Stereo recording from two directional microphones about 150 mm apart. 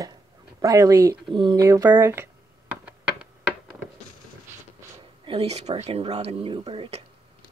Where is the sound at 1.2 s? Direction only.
30° right (ahead or behind); by 2.2 s 15° right (ahead or behind).